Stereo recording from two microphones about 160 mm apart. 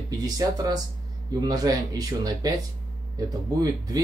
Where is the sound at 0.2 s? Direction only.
25° right (ahead or behind).